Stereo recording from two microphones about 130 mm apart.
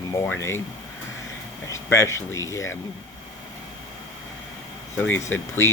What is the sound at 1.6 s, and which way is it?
Speech, 20° left (ahead or behind).